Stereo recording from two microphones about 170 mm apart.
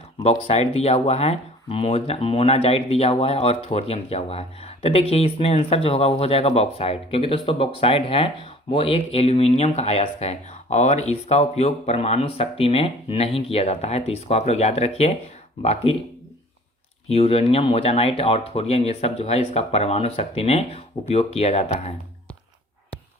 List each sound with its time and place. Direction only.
0.2 s speech: 35° left (ahead or behind)
17.1 s speech: 35° left (ahead or behind)